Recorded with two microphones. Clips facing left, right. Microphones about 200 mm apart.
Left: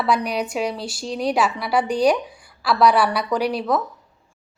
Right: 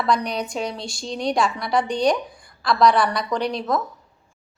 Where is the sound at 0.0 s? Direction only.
5° left (ahead or behind).